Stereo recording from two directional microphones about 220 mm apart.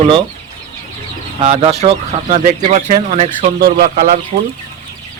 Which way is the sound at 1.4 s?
30° right (ahead or behind).